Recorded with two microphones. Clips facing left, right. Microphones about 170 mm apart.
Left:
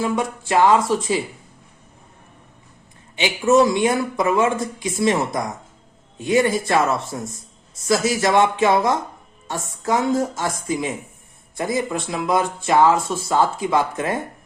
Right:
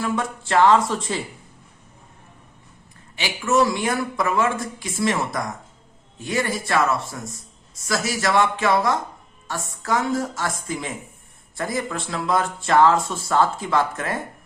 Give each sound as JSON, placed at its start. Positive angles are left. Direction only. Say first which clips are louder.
{"t": 0.0, "sound": "speech", "louder": "left 3 dB", "side_deg": 15}
{"t": 3.2, "sound": "speech", "louder": "left 5 dB", "side_deg": 20}